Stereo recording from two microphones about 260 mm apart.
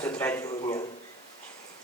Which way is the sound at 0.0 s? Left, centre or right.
Centre.